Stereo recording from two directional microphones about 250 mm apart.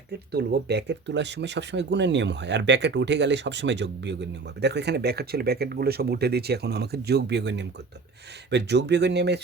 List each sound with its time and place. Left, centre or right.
0.3 s speech: right